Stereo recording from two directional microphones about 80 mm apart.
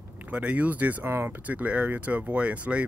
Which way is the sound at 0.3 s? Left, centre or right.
Centre.